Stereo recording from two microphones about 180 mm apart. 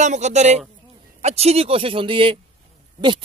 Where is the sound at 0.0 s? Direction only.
40° right (ahead or behind).